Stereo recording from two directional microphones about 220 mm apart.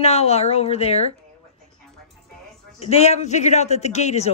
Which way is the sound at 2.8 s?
30° left (ahead or behind).